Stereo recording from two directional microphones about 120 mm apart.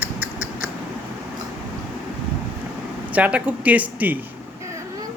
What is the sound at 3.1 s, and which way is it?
Speech, 10° right (ahead or behind).